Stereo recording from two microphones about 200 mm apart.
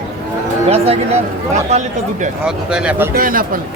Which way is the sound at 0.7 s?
30° right (ahead or behind).